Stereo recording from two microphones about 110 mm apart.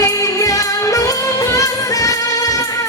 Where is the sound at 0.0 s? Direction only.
30° left (ahead or behind).